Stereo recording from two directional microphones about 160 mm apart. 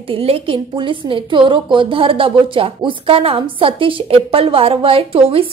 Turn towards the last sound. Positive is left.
turn(degrees=-35)  # may be behind; listen again after turning